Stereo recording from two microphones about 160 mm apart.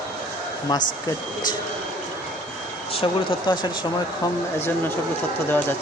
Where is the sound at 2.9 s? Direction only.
35° left (ahead or behind).